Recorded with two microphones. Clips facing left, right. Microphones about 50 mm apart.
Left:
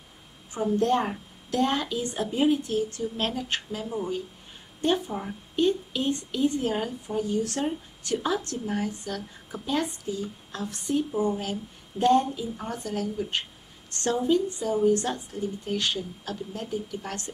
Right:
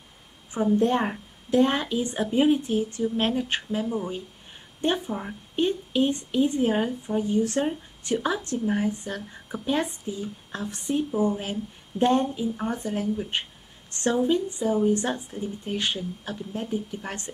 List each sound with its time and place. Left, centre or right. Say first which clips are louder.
0.5 s speech: right 2 dB; centre